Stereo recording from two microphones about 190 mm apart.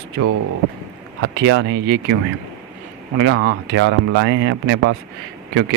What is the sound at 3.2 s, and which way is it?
Speech, 85° right.